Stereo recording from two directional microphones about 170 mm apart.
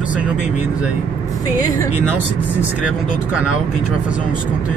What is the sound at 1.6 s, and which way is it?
Speech, 20° left (ahead or behind).